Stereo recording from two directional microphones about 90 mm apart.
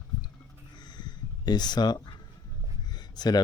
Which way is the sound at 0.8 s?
55° left (ahead or behind).